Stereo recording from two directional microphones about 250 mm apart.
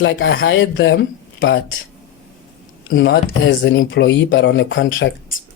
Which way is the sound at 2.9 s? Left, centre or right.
Left.